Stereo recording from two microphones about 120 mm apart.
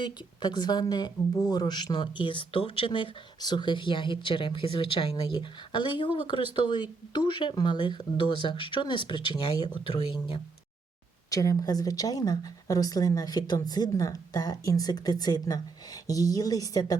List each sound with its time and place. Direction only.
0.0 s speech: 35° left (ahead or behind)
11.3 s speech: 30° left (ahead or behind)